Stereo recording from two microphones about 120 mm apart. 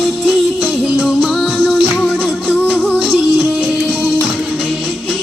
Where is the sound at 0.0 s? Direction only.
5° right (ahead or behind).